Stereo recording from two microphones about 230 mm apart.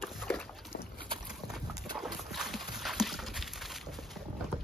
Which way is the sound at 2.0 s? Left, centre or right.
Centre.